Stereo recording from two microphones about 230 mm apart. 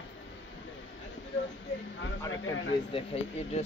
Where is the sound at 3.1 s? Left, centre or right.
Left.